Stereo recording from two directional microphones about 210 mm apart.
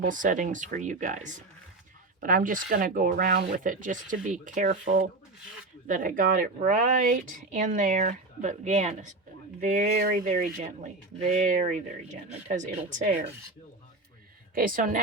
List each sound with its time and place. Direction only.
0.0 s speech: 40° right (ahead or behind)
14.5 s speech: 40° right (ahead or behind)